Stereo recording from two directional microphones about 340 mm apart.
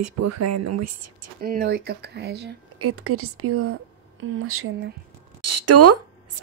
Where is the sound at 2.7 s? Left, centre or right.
Right.